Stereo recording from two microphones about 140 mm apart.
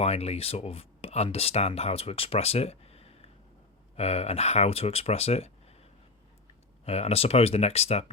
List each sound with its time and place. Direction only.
0.0 s speech: 50° left (ahead or behind)
6.8 s speech: 45° left (ahead or behind)